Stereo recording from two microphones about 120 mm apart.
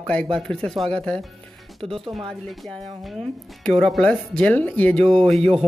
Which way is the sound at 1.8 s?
50° right (ahead or behind).